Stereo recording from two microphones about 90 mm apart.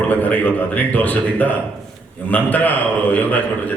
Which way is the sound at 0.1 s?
20° left (ahead or behind).